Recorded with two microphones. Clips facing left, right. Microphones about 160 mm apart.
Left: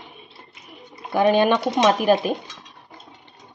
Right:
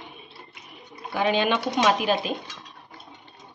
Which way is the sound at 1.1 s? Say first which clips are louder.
Left 6 dB; 50° left (ahead or behind).